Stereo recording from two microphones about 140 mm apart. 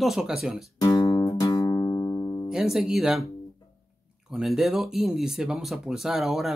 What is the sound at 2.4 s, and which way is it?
Speech, 5° right (ahead or behind).